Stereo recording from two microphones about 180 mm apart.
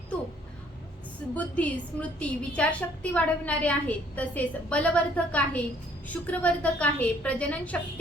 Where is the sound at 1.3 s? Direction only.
5° left (ahead or behind).